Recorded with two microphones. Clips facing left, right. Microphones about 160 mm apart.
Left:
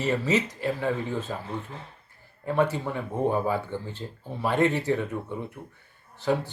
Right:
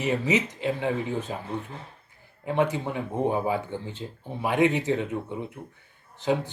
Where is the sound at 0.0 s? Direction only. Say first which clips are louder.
Even; 15° right (ahead or behind).